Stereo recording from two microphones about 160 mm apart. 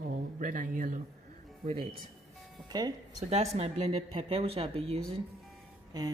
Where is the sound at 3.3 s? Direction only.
45° right (ahead or behind).